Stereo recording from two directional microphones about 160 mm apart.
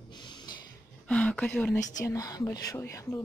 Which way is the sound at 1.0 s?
5° left (ahead or behind).